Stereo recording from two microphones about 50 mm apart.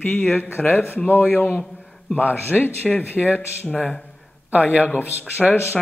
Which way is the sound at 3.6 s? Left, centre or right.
Left.